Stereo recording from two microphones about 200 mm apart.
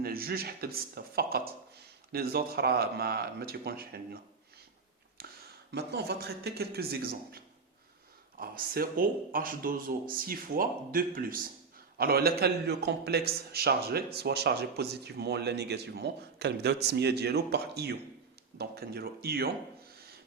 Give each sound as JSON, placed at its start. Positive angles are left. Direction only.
{"t": 0.0, "sound": "speech", "side_deg": -50}
{"t": 5.2, "sound": "a sound", "side_deg": -50}
{"t": 5.7, "sound": "a man's voice", "side_deg": -55}